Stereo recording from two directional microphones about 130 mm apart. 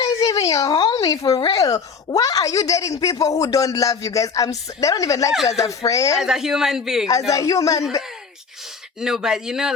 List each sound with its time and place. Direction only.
0.0 s speech: 25° left (ahead or behind)
6.1 s speech: 5° right (ahead or behind)
7.3 s speech: 25° left (ahead or behind)
9.0 s speech: 5° right (ahead or behind)